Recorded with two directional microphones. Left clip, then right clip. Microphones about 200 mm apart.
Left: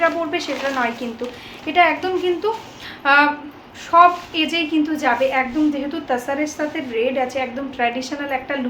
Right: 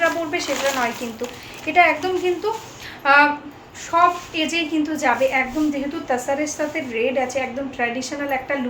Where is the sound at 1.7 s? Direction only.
10° left (ahead or behind).